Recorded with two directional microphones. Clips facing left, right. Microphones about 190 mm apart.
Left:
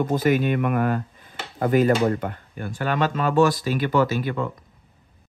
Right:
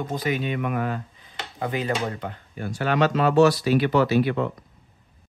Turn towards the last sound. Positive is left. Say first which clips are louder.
# right 2 dB
turn(degrees=45)  # may be behind; listen again after turning